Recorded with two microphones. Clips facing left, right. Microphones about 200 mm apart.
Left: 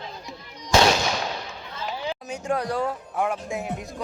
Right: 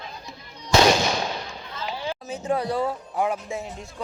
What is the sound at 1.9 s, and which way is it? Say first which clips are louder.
Chatter: even; 15° left (ahead or behind).